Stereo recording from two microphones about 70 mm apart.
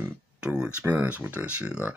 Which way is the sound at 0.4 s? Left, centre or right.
Centre.